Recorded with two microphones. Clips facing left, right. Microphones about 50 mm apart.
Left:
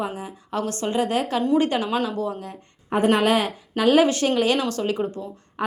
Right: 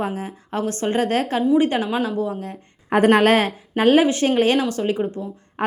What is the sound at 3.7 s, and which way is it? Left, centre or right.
Speech, right.